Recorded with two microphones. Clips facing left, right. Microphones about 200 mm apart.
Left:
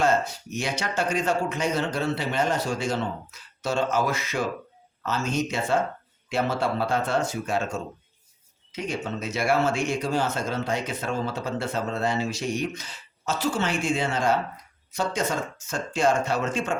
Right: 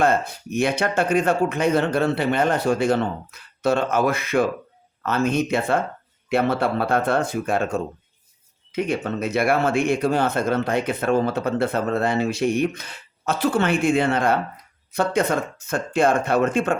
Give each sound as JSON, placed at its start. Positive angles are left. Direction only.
{"t": 0.0, "sound": "speech", "side_deg": -55}